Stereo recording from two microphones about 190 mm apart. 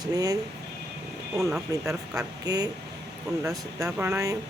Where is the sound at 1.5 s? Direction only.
5° right (ahead or behind).